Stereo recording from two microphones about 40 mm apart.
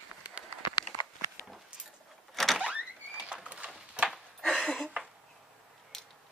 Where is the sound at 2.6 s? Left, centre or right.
Right.